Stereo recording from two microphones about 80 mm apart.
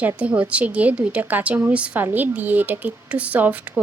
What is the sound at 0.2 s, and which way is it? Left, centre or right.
A woman's voice, centre.